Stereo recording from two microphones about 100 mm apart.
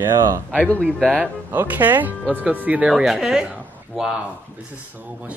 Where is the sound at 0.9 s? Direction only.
10° left (ahead or behind).